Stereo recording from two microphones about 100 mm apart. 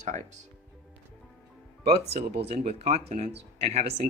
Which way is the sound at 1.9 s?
90° right.